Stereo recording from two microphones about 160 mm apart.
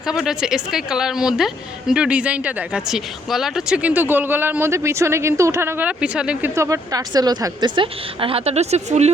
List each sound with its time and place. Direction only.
0.0 s a woman's voice: 5° right (ahead or behind)
6.5 s a woman's voice: 20° right (ahead or behind); by 9.1 s 45° right (ahead or behind)